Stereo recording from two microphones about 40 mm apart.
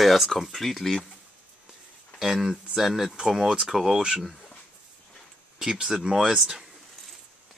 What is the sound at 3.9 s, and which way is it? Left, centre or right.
Speech, centre.